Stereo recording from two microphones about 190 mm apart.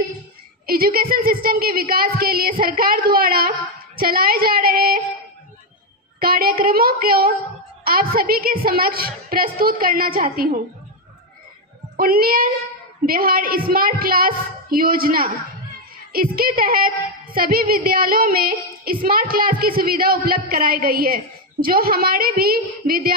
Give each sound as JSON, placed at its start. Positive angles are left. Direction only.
{"t": 0.7, "sound": "a woman's voice", "side_deg": -50}
{"t": 6.2, "sound": "a woman's voice", "side_deg": -50}
{"t": 12.0, "sound": "a woman's voice", "side_deg": -50}